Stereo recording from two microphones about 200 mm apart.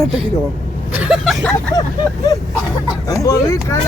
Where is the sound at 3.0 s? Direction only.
15° left (ahead or behind).